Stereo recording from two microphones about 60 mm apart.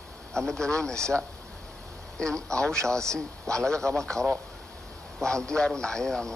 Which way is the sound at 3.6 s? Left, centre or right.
Centre.